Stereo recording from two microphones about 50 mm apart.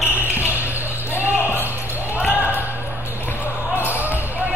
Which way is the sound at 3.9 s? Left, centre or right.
Right.